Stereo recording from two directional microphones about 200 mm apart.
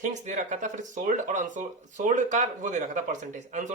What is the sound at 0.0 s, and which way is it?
Speech, 40° right (ahead or behind).